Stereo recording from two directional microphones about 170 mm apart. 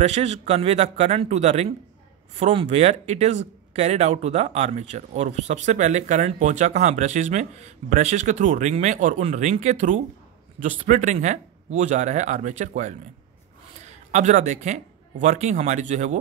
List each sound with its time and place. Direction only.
0.0 s a man's voice: 40° right (ahead or behind)
14.1 s speech: 45° right (ahead or behind)